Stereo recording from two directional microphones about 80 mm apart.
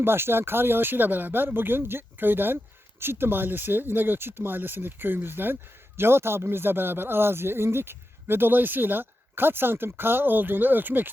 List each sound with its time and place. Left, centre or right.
0.0 s speech: right